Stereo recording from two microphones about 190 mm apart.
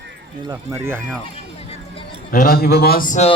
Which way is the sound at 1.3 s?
30° left (ahead or behind).